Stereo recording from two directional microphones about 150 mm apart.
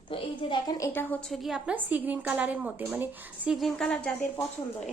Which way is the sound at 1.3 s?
Centre (ahead or behind).